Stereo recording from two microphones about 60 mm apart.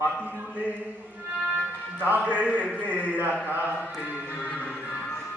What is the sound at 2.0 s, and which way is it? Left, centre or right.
Speech, right.